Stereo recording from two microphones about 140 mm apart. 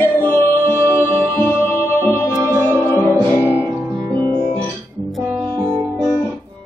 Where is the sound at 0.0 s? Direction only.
15° left (ahead or behind).